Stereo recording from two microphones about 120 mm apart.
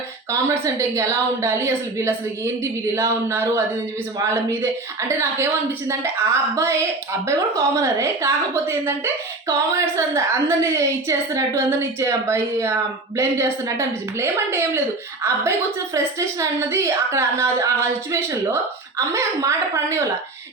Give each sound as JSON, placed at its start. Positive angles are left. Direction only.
{"t": 0.3, "sound": "a woman's voice", "side_deg": -25}